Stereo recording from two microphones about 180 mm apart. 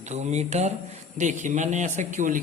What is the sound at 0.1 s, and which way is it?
A man's voice, 40° right (ahead or behind).